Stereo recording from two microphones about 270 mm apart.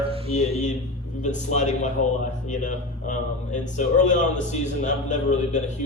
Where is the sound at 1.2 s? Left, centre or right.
Left.